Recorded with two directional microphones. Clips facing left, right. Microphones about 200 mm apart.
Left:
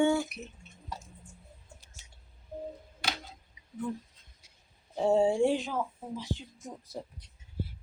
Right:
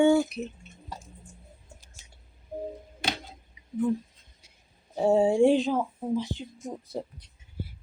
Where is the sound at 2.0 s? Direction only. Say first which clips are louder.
Right 3 dB; 45° right (ahead or behind).